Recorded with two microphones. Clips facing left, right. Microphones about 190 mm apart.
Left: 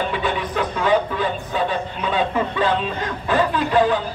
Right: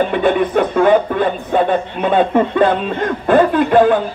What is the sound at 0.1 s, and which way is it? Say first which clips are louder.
Speech: right 9 dB; 55° right (ahead or behind).